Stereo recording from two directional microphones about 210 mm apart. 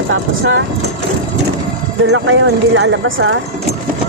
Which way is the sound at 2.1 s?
70° right (ahead or behind).